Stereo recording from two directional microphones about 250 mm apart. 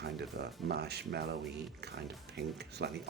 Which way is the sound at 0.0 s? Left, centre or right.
Right.